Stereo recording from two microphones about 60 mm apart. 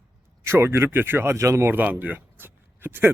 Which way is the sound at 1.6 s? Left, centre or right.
Right.